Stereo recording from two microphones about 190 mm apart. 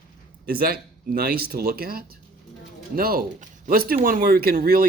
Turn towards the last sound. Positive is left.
turn(degrees=-50)  # may be behind; listen again after turning